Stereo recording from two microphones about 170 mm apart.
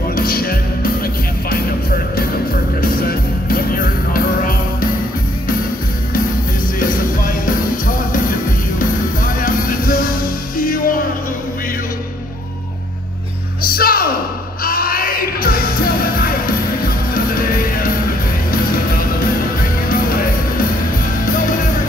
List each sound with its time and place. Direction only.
0.1 s music: 60° left (ahead or behind)
3.7 s music: 55° left (ahead or behind)
6.8 s music: 55° left (ahead or behind)
13.6 s music: 60° left (ahead or behind)